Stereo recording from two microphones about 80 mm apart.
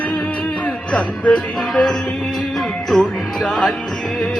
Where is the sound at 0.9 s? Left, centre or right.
Centre.